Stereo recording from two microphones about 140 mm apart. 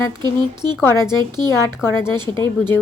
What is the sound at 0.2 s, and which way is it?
Speech, 30° right (ahead or behind).